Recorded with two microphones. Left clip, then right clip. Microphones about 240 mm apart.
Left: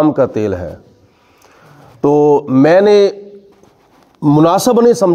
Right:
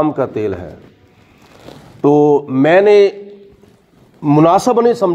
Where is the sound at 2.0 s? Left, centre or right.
Left.